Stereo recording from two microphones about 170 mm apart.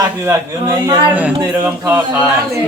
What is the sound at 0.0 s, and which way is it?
A man's voice, 20° right (ahead or behind).